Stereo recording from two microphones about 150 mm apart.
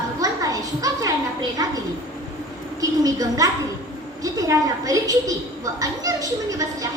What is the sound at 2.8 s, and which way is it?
A woman's voice, 25° right (ahead or behind).